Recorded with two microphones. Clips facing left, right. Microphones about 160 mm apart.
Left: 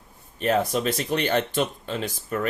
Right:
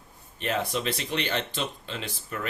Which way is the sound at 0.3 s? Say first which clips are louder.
Left 6 dB; 40° left (ahead or behind).